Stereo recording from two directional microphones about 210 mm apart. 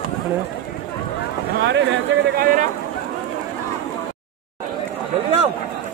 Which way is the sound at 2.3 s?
40° right (ahead or behind).